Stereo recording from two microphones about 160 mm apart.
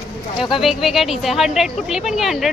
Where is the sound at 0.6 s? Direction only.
Centre (ahead or behind).